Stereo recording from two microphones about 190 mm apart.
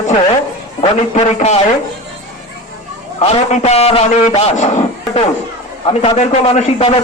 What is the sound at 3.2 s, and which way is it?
A man's voice, 35° left (ahead or behind).